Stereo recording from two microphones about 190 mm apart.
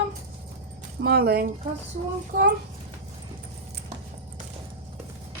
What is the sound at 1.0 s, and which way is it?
A woman's voice, 55° right (ahead or behind).